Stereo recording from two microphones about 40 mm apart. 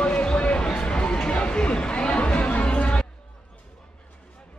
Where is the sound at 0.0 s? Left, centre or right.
Left.